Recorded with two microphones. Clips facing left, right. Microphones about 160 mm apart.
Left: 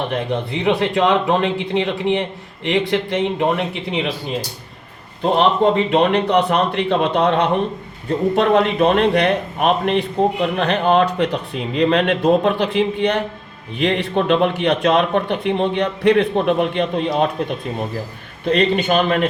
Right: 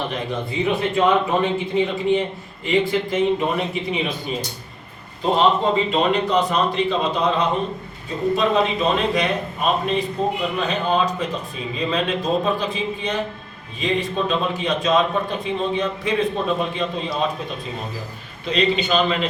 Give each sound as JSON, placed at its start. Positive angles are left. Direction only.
{"t": 0.1, "sound": "a man's voice", "side_deg": 70}
{"t": 5.4, "sound": "a man's voice", "side_deg": 60}
{"t": 18.4, "sound": "a man's voice", "side_deg": 55}